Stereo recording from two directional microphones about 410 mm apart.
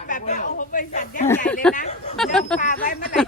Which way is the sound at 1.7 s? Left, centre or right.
Centre.